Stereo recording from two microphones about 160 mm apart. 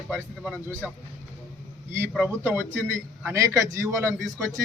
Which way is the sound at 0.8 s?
5° right (ahead or behind).